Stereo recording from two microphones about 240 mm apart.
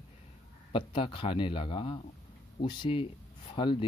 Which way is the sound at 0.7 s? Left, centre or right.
Left.